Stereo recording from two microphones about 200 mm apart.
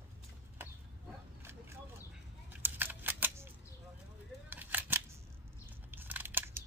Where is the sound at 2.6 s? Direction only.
10° right (ahead or behind).